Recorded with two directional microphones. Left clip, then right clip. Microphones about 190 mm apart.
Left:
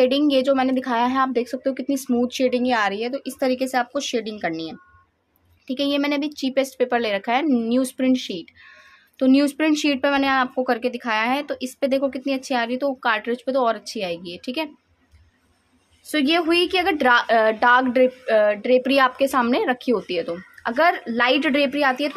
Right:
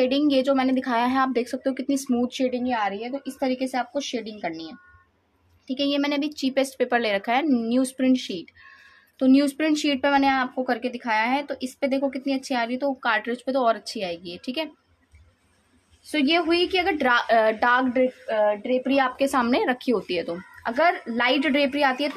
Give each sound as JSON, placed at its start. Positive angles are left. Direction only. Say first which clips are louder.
{"t": 0.0, "sound": "a woman's voice", "louder": "left 3 dB", "side_deg": 20}
{"t": 16.1, "sound": "a woman's voice", "louder": "left 2 dB", "side_deg": 25}
{"t": 17.9, "sound": "speech", "louder": "left 5 dB", "side_deg": 30}
{"t": 19.1, "sound": "speech", "louder": "left 2 dB", "side_deg": 10}